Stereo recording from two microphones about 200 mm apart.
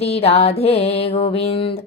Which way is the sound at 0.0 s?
30° left (ahead or behind).